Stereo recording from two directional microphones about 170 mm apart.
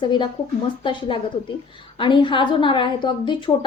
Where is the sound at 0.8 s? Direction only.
30° left (ahead or behind).